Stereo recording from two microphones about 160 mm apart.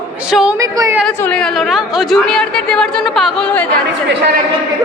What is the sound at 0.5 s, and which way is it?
Speech, 20° right (ahead or behind).